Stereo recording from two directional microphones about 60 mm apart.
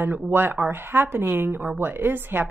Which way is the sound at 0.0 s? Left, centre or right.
Right.